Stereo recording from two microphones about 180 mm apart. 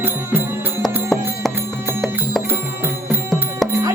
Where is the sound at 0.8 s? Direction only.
Centre (ahead or behind).